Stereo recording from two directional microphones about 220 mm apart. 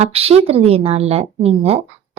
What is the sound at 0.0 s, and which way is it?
Speech, 25° right (ahead or behind).